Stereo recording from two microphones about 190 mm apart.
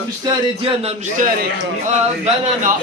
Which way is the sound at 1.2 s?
45° right (ahead or behind).